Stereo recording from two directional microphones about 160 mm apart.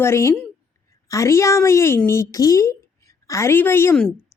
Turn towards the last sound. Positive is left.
turn(degrees=15)  # may be behind; listen again after turning